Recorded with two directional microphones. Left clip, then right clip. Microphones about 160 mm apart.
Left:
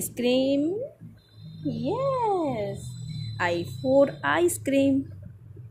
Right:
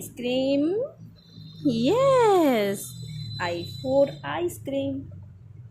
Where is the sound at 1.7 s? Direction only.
35° right (ahead or behind).